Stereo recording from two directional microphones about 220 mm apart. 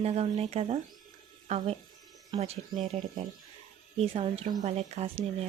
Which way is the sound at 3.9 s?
25° right (ahead or behind).